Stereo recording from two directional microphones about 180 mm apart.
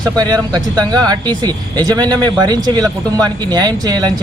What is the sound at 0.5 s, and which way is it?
Speech, 20° right (ahead or behind).